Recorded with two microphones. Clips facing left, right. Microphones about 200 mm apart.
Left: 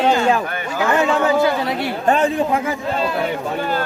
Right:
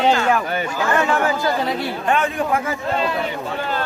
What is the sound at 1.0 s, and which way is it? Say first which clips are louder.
Speech: left 2 dB; 20° left (ahead or behind).